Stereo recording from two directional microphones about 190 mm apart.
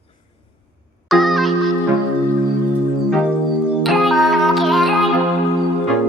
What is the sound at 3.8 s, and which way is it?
Music, centre (ahead or behind).